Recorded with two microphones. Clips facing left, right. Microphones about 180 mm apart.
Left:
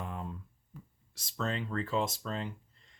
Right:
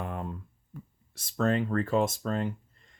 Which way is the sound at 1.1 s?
50° right (ahead or behind).